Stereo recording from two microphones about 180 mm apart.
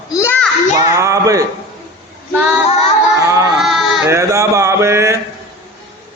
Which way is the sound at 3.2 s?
15° right (ahead or behind).